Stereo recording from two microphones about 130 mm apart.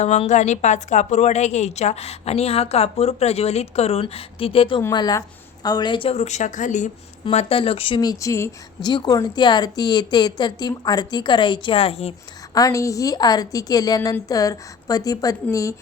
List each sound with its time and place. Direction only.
0.0 s a woman's voice: 60° left (ahead or behind); by 4.8 s 45° left (ahead or behind)
4.8 s a woman's voice: 30° left (ahead or behind); by 6.9 s 70° left (ahead or behind)
7.3 s speech: 45° left (ahead or behind)
8.2 s a woman's voice: 25° left (ahead or behind)
8.9 s a woman's voice: 35° left (ahead or behind)
12.5 s a woman's voice: 25° left (ahead or behind)